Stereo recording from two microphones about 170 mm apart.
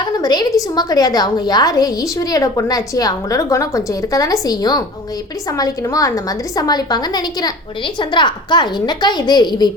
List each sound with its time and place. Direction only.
0.0 s a woman's voice: 25° left (ahead or behind)